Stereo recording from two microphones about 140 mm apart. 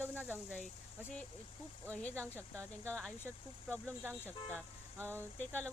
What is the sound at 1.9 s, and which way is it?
Speech, 10° left (ahead or behind).